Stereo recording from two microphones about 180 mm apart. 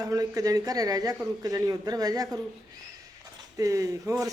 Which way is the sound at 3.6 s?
20° right (ahead or behind).